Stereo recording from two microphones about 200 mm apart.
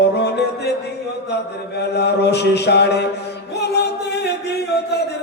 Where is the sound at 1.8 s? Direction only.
55° left (ahead or behind).